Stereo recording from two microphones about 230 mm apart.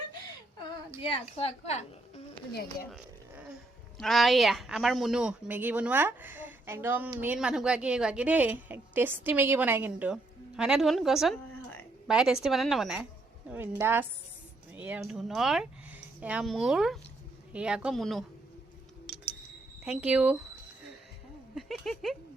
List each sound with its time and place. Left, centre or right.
1.1 s a woman's voice: left
3.9 s a woman's voice: centre
19.8 s a woman's voice: centre
21.5 s speech: centre